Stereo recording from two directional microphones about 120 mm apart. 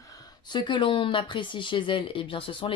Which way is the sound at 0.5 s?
40° left (ahead or behind).